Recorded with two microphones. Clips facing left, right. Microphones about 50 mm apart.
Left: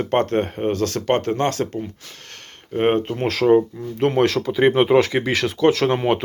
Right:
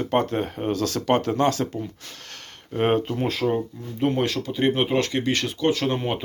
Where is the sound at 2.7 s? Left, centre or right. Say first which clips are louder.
Left 3 dB; left.